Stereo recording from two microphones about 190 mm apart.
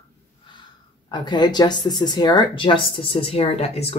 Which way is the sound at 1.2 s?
20° left (ahead or behind).